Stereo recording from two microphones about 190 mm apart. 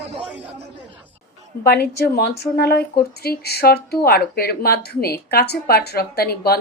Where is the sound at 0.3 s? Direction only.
10° right (ahead or behind).